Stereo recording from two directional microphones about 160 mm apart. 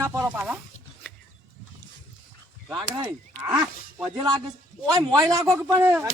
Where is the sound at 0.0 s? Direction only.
15° right (ahead or behind).